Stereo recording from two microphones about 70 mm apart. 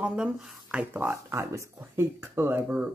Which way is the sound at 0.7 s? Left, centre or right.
Right.